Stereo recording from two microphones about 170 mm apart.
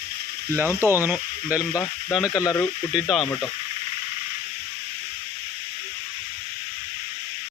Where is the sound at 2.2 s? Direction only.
20° left (ahead or behind).